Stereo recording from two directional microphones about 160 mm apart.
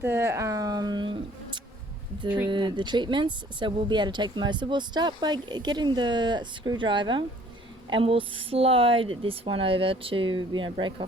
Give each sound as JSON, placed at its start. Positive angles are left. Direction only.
{"t": 0.0, "sound": "speech", "side_deg": -15}